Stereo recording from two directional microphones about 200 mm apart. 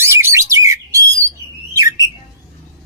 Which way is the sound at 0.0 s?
10° right (ahead or behind).